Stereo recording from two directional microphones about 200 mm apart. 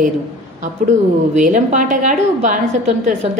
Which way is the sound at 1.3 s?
40° right (ahead or behind).